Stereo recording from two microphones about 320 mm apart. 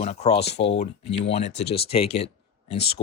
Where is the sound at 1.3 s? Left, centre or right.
Centre.